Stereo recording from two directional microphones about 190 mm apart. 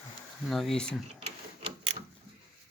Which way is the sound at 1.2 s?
30° right (ahead or behind).